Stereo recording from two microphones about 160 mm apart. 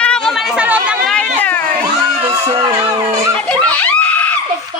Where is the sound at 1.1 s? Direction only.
10° left (ahead or behind).